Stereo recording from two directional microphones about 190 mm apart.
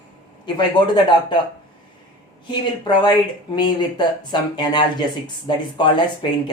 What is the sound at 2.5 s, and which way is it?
Speech, 25° left (ahead or behind).